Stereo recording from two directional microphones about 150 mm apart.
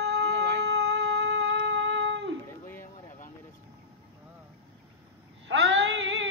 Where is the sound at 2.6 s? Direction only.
15° left (ahead or behind).